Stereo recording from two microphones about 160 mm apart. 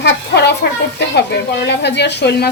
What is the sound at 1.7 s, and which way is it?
Speech, 90° left.